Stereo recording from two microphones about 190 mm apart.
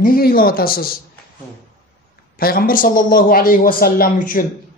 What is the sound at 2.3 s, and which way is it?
A man's voice, 50° left (ahead or behind).